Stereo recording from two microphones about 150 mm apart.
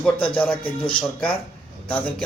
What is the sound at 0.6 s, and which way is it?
Speech, 35° left (ahead or behind).